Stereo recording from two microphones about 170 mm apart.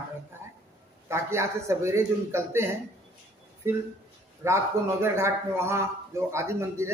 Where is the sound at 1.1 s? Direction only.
15° right (ahead or behind).